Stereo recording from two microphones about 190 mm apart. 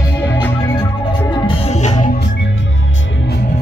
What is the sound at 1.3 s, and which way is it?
Music, 30° left (ahead or behind).